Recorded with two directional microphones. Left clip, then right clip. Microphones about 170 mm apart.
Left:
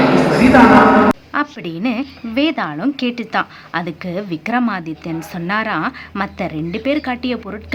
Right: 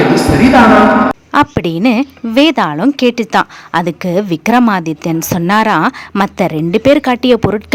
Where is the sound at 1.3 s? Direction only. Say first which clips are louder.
Right 9 dB; 55° right (ahead or behind).